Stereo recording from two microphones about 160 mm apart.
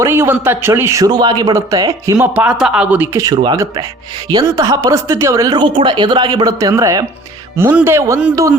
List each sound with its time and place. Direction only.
0.0 s a woman's voice: 15° right (ahead or behind)
2.1 s a woman's voice: 10° right (ahead or behind)